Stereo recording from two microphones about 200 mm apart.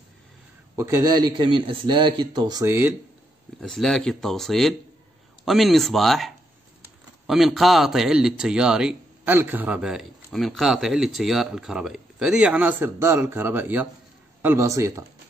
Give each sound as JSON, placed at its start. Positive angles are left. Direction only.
{"t": 0.7, "sound": "a man's voice", "side_deg": -15}
{"t": 3.6, "sound": "a man's voice", "side_deg": 5}